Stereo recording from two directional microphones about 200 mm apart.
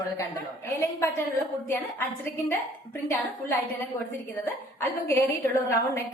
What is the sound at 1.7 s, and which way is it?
Speech, 10° left (ahead or behind).